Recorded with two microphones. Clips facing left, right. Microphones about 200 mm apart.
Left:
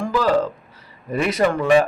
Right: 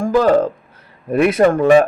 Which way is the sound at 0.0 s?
50° right (ahead or behind).